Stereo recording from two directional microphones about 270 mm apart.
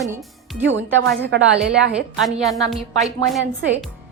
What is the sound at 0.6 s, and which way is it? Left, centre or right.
A woman's voice, right.